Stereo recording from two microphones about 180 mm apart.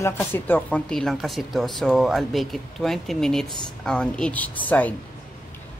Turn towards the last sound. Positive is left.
turn(degrees=10)  # may be behind; listen again after turning